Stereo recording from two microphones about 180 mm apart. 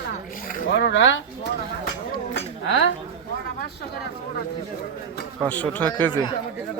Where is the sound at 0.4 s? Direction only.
60° left (ahead or behind); by 1.2 s 85° left.